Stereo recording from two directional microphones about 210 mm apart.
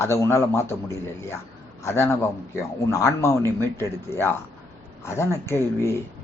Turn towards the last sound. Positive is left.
turn(degrees=15)  # may be behind; listen again after turning